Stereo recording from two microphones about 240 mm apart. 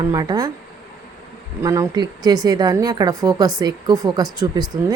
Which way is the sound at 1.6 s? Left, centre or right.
Centre.